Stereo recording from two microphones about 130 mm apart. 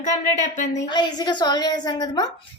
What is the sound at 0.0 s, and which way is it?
Speech, 70° left (ahead or behind).